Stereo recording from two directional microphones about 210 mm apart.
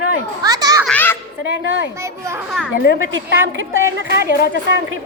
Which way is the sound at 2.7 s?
50° left (ahead or behind).